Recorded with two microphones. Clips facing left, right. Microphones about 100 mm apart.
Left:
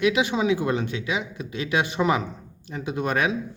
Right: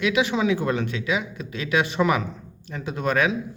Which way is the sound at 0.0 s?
25° left (ahead or behind).